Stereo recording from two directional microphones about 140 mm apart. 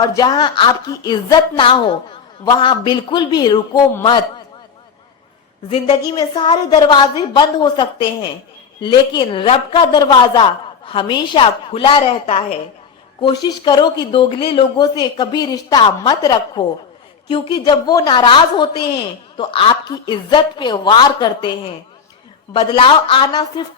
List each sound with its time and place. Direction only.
0.0 s a woman's voice: 30° left (ahead or behind)
5.6 s a woman's voice: 40° left (ahead or behind)
13.2 s a woman's voice: 30° left (ahead or behind)